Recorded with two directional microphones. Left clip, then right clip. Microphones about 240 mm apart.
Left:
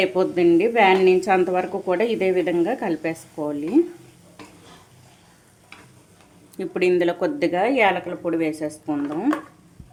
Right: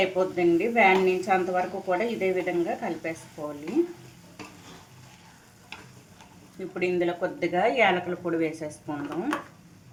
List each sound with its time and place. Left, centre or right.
0.2 s a woman's voice: left
6.7 s a woman's voice: left